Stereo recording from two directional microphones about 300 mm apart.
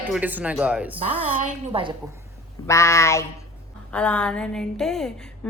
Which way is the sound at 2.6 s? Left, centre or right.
Centre.